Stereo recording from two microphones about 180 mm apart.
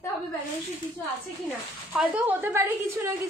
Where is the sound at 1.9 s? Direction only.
5° right (ahead or behind).